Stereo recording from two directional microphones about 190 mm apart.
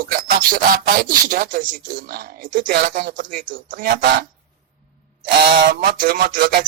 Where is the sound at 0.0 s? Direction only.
50° right (ahead or behind).